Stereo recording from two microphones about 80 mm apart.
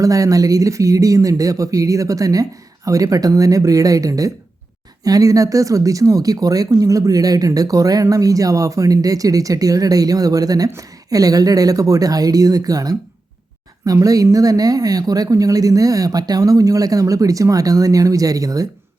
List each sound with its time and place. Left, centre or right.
0.0 s speech: right